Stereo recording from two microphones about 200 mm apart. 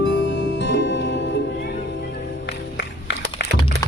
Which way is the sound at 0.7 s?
60° left (ahead or behind).